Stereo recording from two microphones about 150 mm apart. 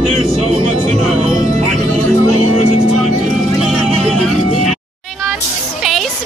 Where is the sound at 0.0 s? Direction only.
40° right (ahead or behind).